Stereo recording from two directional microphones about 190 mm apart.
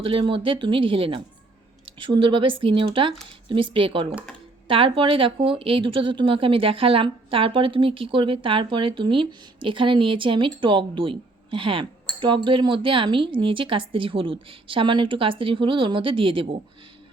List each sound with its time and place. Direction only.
0.0 s speech: 30° right (ahead or behind)